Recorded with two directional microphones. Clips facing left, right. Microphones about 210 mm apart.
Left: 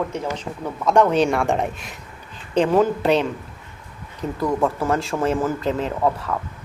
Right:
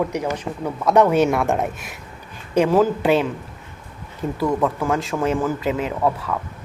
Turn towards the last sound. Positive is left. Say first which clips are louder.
# even
turn(degrees=0)  # may be behind; listen again after turning